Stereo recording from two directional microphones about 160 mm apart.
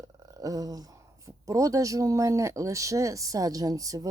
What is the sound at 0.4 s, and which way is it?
Speech, 25° right (ahead or behind).